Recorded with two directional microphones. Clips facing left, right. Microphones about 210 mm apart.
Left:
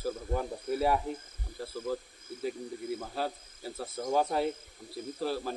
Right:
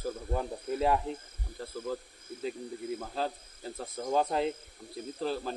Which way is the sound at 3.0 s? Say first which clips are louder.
Right 1 dB; 5° left (ahead or behind).